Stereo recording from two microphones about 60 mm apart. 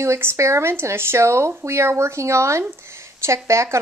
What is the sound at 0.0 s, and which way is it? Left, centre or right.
A woman's voice, right.